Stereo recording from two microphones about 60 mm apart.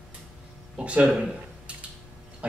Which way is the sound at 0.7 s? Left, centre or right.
Centre.